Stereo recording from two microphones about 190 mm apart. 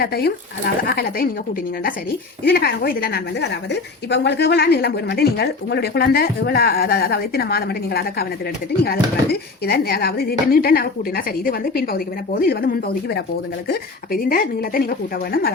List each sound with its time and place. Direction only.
0.0 s a woman's voice: 55° left (ahead or behind)
2.4 s a woman's voice: 55° left (ahead or behind)